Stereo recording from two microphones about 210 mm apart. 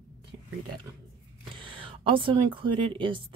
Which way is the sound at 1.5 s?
25° right (ahead or behind).